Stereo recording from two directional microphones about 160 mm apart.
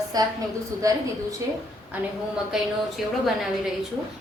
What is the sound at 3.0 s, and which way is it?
Speech, 5° right (ahead or behind).